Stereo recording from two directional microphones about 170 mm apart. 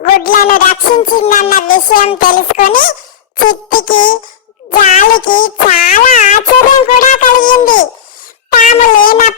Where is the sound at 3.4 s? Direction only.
55° left (ahead or behind).